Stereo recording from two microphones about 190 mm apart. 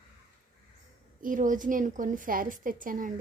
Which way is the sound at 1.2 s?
45° right (ahead or behind).